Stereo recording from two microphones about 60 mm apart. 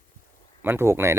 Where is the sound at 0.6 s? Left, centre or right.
Right.